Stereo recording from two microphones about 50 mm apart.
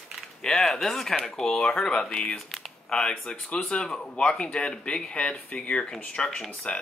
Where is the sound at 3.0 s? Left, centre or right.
Left.